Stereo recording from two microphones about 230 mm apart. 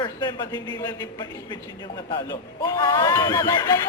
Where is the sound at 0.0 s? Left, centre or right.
Centre.